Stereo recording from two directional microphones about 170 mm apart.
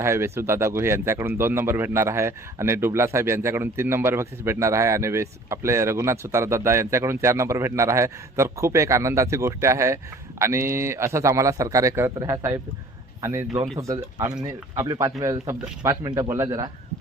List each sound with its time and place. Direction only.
0.0 s speech: 15° right (ahead or behind)